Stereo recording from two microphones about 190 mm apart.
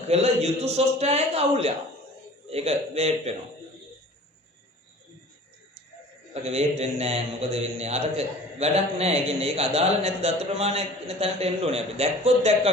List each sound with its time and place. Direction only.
0.1 s a man's voice: 35° right (ahead or behind)
6.3 s a man's voice: 35° right (ahead or behind)